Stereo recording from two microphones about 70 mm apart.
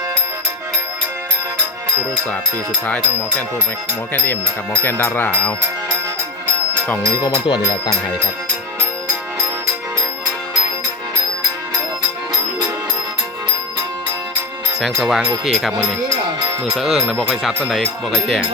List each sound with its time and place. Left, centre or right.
2.8 s music: left
4.8 s a sound: left
7.2 s speech: left
14.8 s speech: centre
16.7 s speech: centre